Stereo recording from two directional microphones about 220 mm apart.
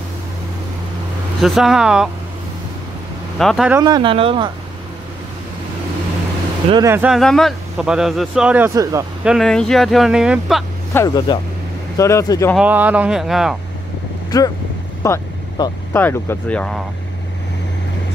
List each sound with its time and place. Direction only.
1.4 s speech: centre (ahead or behind)
3.3 s speech: centre (ahead or behind)
3.8 s speech: 20° right (ahead or behind)
6.7 s speech: 15° right (ahead or behind)
9.3 s speech: centre (ahead or behind)
10.9 s speech: 15° left (ahead or behind)
12.5 s speech: 5° right (ahead or behind)
15.0 s vehicle: 15° left (ahead or behind)
16.0 s speech: 10° left (ahead or behind)